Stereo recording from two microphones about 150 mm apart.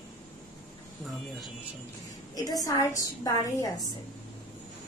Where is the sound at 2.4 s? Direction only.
25° left (ahead or behind).